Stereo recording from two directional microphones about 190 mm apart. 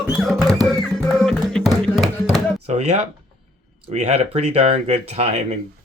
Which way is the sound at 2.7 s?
35° right (ahead or behind).